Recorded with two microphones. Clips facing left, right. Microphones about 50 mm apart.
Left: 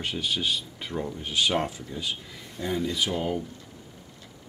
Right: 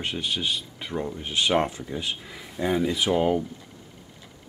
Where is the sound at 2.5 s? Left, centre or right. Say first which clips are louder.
Right 4 dB; centre.